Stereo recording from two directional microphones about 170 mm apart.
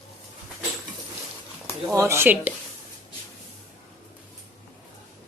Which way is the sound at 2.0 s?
15° right (ahead or behind).